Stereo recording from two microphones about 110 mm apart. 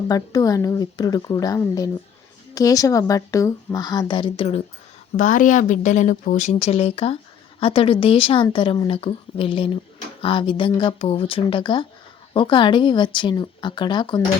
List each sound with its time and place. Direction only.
0.1 s a woman's voice: 35° left (ahead or behind); by 5.3 s 60° left (ahead or behind)
5.7 s a woman's voice: 90° left; by 14.2 s 45° left (ahead or behind)